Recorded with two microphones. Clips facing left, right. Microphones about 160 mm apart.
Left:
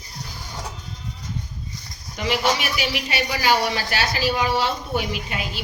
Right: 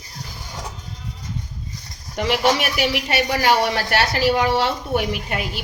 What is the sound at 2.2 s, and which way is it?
A woman's voice, 60° right (ahead or behind).